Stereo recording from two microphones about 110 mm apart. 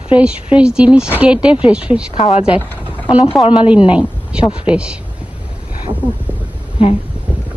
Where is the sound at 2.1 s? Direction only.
55° left (ahead or behind).